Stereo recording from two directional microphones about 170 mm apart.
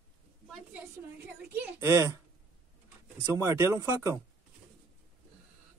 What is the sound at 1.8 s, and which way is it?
Speech, 20° right (ahead or behind).